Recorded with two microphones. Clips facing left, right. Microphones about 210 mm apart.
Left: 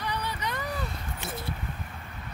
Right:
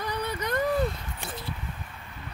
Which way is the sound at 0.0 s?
45° right (ahead or behind).